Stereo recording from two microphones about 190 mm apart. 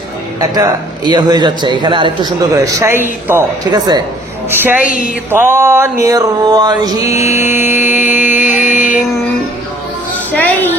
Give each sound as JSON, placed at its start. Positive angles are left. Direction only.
{"t": 0.3, "sound": "a woman's voice", "side_deg": -20}
{"t": 5.3, "sound": "mantra", "side_deg": -10}
{"t": 7.0, "sound": "mantra", "side_deg": 35}
{"t": 7.5, "sound": "mantra", "side_deg": -10}
{"t": 8.1, "sound": "a sound", "side_deg": -10}
{"t": 8.4, "sound": "mantra", "side_deg": 40}
{"t": 10.3, "sound": "music", "side_deg": 10}